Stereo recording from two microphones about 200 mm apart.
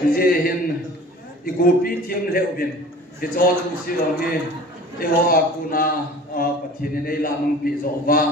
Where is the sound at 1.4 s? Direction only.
45° left (ahead or behind).